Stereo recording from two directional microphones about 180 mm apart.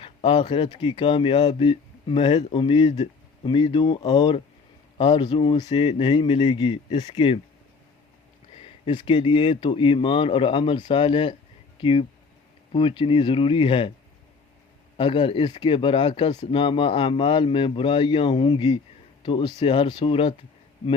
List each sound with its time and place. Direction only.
0.0 s speech: 25° left (ahead or behind)
8.6 s speech: 30° left (ahead or behind)
14.9 s speech: 30° left (ahead or behind)